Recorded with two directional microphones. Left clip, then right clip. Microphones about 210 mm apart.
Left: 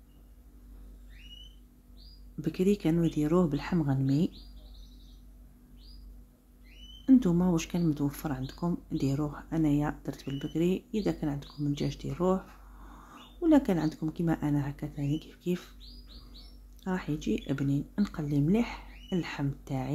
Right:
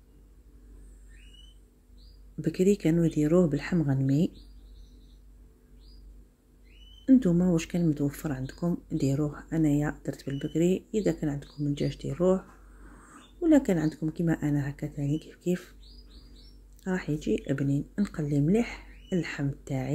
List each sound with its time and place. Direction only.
2.4 s speech: 5° right (ahead or behind)
7.1 s speech: 5° right (ahead or behind)
16.8 s speech: 5° right (ahead or behind)